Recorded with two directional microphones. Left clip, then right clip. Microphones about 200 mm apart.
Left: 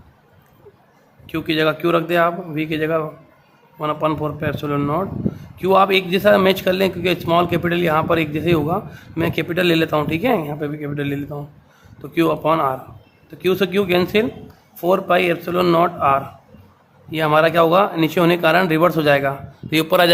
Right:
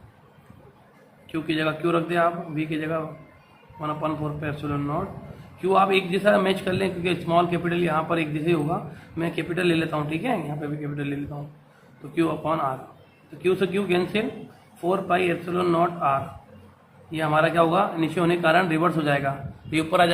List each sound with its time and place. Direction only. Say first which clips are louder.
1.3 s a man's voice: left 7 dB; 45° left (ahead or behind)